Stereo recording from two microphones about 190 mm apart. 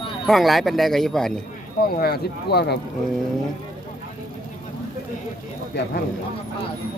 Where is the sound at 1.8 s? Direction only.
55° left (ahead or behind).